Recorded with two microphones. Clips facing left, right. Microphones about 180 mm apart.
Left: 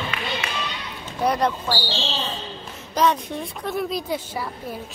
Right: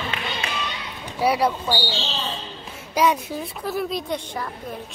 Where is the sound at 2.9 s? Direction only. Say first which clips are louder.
Even; 10° right (ahead or behind); by 4.5 s 5° left (ahead or behind).